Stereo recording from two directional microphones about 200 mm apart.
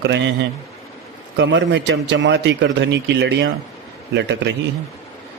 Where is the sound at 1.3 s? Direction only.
60° right (ahead or behind).